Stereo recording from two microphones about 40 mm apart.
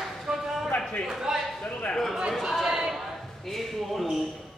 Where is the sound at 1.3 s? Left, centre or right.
Centre.